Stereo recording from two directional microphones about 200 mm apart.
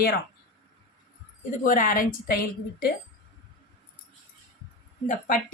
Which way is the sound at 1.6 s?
40° left (ahead or behind).